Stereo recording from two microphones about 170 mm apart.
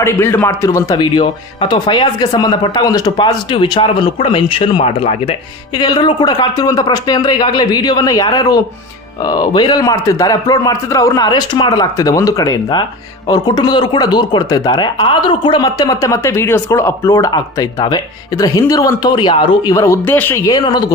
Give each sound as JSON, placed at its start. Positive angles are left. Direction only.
{"t": 0.0, "sound": "speech", "side_deg": 15}